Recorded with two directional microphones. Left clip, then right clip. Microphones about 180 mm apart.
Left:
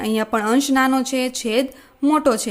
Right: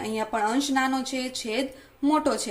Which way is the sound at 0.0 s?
45° left (ahead or behind).